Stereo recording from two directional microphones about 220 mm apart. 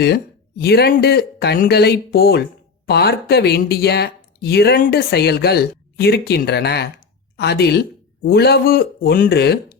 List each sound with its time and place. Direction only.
0.0 s speech: 45° left (ahead or behind)